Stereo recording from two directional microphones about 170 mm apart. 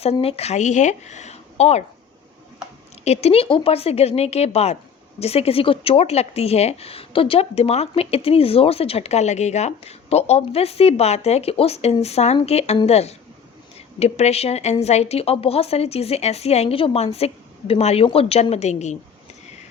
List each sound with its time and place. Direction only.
0.0 s speech: 35° left (ahead or behind)
3.0 s speech: 40° left (ahead or behind)